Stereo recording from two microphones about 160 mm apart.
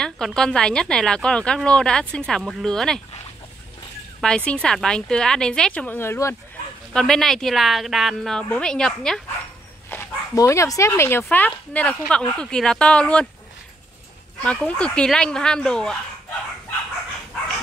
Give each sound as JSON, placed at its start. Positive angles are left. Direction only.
{"t": 0.0, "sound": "speech", "side_deg": 5}
{"t": 4.5, "sound": "speech", "side_deg": 5}
{"t": 6.9, "sound": "speech", "side_deg": 5}
{"t": 9.8, "sound": "speech", "side_deg": 15}
{"t": 14.4, "sound": "speech", "side_deg": 5}